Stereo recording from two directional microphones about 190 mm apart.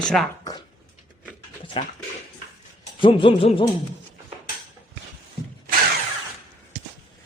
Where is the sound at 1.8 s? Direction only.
25° left (ahead or behind).